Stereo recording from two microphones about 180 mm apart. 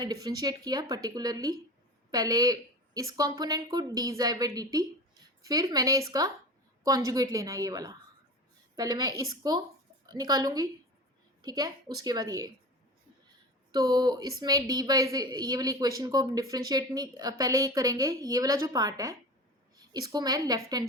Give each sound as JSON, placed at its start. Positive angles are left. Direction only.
{"t": 0.0, "sound": "a woman's voice", "side_deg": -20}
{"t": 13.7, "sound": "a woman's voice", "side_deg": -20}